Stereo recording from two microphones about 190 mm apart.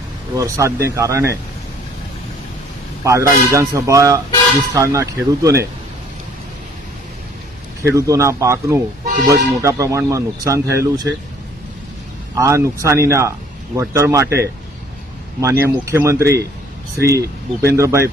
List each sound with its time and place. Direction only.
0.3 s speech: 15° right (ahead or behind)
3.0 s speech: 15° right (ahead or behind)
7.9 s speech: 15° right (ahead or behind)
12.3 s speech: 15° right (ahead or behind)